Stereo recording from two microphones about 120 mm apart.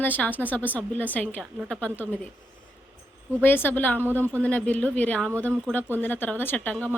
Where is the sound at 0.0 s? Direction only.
15° left (ahead or behind).